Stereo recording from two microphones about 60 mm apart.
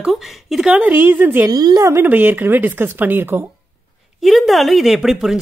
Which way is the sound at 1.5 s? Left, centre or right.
Right.